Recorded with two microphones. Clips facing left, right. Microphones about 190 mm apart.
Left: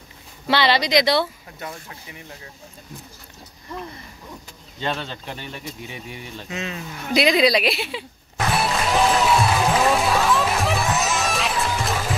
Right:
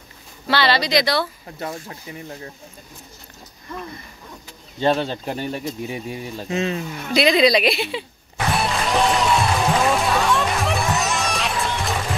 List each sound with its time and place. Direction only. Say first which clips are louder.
0.5 s speech: even; 20° left (ahead or behind)
1.6 s speech: right 5 dB; 35° right (ahead or behind)
4.7 s speech: right 8 dB; 35° right (ahead or behind)
7.1 s a woman's voice: right 1 dB; 10° left (ahead or behind)
8.5 s music: even; centre (ahead or behind)